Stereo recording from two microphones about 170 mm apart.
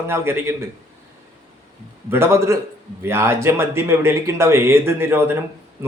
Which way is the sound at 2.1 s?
15° right (ahead or behind).